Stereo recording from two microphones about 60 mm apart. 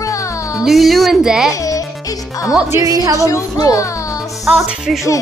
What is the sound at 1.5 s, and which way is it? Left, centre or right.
Music, left.